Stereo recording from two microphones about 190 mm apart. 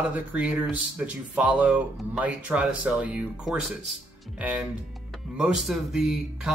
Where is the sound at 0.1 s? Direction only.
5° right (ahead or behind).